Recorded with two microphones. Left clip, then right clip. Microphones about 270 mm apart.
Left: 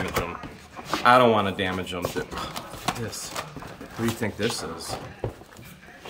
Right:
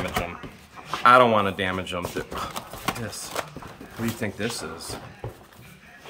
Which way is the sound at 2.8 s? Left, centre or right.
Centre.